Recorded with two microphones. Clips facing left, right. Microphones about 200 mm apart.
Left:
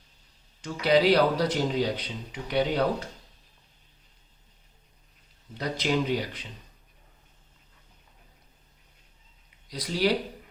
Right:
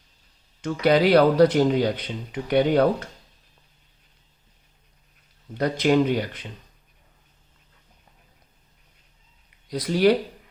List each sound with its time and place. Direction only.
0.6 s speech: 55° right (ahead or behind)
5.5 s speech: 55° right (ahead or behind)
9.6 s speech: 55° right (ahead or behind)